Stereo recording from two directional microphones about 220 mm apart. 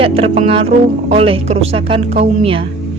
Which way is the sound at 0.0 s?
25° right (ahead or behind).